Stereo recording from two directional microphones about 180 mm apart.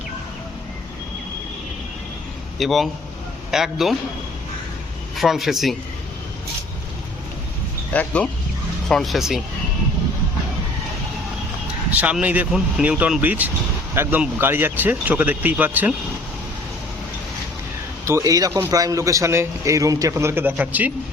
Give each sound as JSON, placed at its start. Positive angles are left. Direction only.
{"t": 2.6, "sound": "speech", "side_deg": 0}
{"t": 5.1, "sound": "speech", "side_deg": 0}
{"t": 7.9, "sound": "speech", "side_deg": 5}
{"t": 11.9, "sound": "a man's voice", "side_deg": -10}
{"t": 18.0, "sound": "a man's voice", "side_deg": -15}